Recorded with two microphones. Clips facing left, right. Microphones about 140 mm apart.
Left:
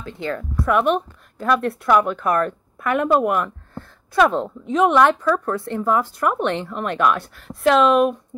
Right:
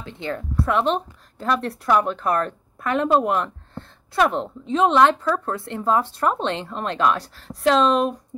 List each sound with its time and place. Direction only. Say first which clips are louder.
0.0 s a woman's voice: left 2 dB; 20° right (ahead or behind)